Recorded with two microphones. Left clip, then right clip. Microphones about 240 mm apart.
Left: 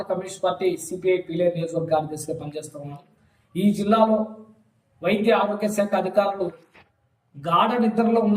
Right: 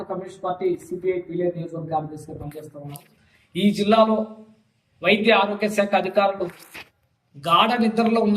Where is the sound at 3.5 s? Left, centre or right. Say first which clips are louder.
Right 3 dB; centre.